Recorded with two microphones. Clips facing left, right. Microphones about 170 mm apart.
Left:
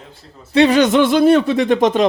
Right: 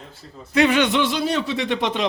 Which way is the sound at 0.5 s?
35° left (ahead or behind).